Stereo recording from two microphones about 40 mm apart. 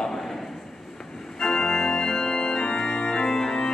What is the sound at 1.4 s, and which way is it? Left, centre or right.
Organ, centre.